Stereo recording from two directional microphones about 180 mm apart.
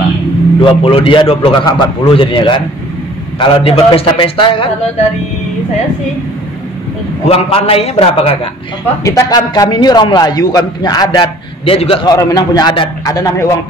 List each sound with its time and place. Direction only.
0.7 s a man's voice: 30° left (ahead or behind)
7.2 s a man's voice: 30° left (ahead or behind)
9.0 s a man's voice: 20° left (ahead or behind)